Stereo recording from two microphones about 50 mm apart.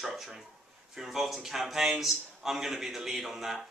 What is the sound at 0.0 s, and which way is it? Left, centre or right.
A man's voice, centre.